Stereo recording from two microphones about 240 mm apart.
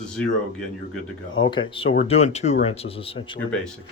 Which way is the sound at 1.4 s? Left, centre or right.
Centre.